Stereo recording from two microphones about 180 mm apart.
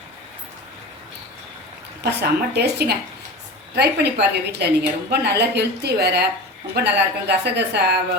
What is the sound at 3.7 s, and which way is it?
A woman's voice, 65° right (ahead or behind).